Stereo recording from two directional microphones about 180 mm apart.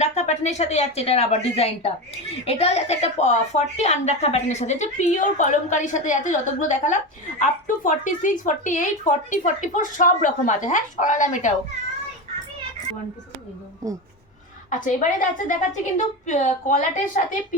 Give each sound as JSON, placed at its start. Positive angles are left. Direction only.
{"t": 0.0, "sound": "a woman's voice", "side_deg": 40}
{"t": 14.7, "sound": "speech", "side_deg": 45}